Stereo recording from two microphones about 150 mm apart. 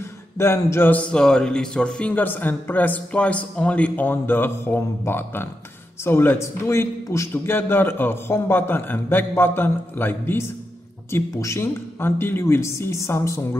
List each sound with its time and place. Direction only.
0.4 s a man's voice: 15° left (ahead or behind)